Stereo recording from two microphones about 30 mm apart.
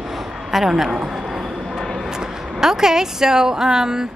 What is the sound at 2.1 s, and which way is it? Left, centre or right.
A woman's voice, right.